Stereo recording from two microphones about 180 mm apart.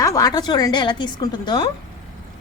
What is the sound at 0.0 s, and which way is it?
Speech, 20° left (ahead or behind).